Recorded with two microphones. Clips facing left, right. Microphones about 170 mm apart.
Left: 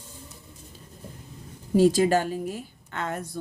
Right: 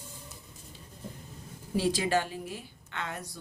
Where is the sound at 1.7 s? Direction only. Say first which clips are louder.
Left 8 dB; 45° left (ahead or behind).